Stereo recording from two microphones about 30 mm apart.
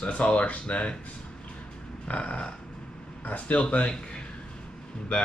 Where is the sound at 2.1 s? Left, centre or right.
Left.